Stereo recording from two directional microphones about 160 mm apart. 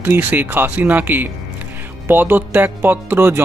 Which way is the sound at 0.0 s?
10° right (ahead or behind).